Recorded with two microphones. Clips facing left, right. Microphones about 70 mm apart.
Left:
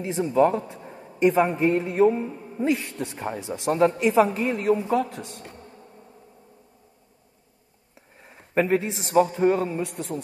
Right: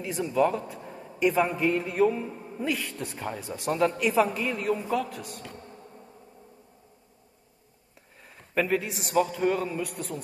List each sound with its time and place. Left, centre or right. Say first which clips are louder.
0.0 s a man's voice: left 4 dB; left
7.9 s a man's voice: left 3 dB; left